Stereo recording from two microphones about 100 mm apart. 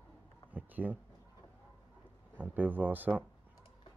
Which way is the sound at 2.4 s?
15° right (ahead or behind).